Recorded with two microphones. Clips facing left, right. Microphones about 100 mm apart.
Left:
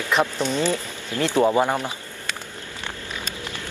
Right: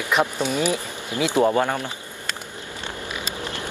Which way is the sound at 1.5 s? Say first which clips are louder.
Left 1 dB; 15° left (ahead or behind).